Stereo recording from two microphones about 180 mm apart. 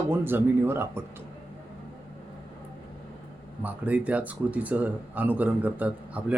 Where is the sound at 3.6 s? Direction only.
10° right (ahead or behind).